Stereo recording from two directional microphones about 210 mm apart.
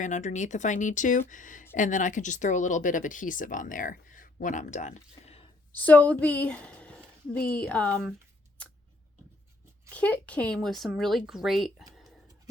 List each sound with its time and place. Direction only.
0.0 s speech: 35° left (ahead or behind)
5.7 s speech: 10° left (ahead or behind)
9.9 s speech: 5° left (ahead or behind)